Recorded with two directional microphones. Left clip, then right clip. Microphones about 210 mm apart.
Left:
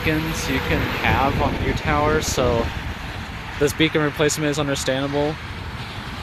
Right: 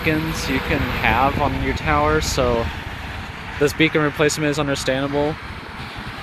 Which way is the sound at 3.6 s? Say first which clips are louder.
Right 2 dB; 5° right (ahead or behind).